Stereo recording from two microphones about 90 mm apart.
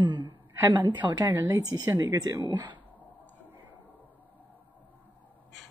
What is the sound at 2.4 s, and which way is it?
Speech, 60° right (ahead or behind).